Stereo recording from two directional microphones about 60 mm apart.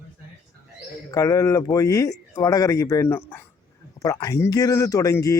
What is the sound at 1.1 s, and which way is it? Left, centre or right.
Speech, left.